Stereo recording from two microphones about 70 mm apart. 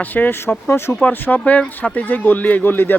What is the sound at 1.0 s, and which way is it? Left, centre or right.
A child's voice, left.